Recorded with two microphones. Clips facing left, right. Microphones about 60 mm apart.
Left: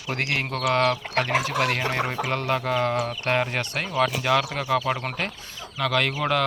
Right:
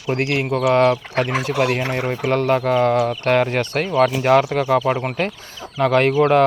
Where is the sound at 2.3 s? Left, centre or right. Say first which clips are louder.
Right 8 dB; right.